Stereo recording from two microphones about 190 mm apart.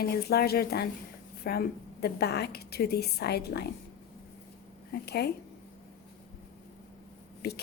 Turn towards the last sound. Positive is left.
turn(degrees=55)  # may be behind; listen again after turning